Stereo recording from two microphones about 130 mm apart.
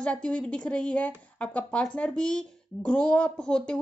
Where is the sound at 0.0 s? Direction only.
10° left (ahead or behind).